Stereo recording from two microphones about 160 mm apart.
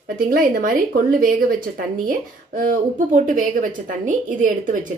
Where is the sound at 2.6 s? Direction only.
55° right (ahead or behind).